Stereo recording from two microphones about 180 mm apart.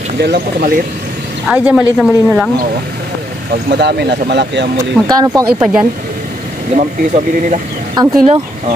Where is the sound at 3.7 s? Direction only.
65° right (ahead or behind).